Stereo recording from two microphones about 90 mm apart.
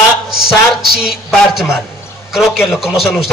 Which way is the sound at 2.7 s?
Centre (ahead or behind).